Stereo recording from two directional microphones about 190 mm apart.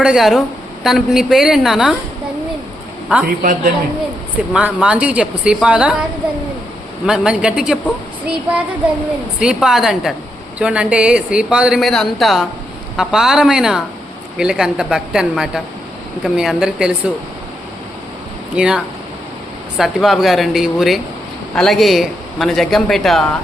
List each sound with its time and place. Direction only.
0.0 s speech: centre (ahead or behind)
3.1 s a man's voice: 5° right (ahead or behind)
3.4 s a woman's voice: 40° right (ahead or behind)
4.5 s speech: 5° right (ahead or behind)
9.4 s speech: 5° right (ahead or behind)
18.5 s speech: 5° right (ahead or behind)